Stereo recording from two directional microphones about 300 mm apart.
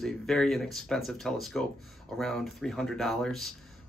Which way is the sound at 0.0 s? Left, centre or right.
Centre.